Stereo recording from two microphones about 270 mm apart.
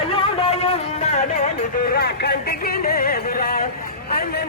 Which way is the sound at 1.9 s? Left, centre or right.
Left.